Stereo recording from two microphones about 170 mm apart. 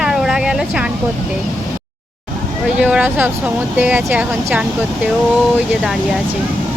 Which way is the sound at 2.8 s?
10° right (ahead or behind).